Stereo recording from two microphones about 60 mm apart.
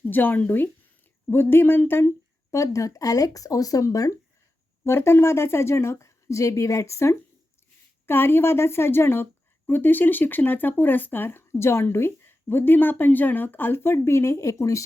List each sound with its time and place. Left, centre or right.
0.0 s speech: left
4.8 s a woman's voice: left
8.0 s speech: left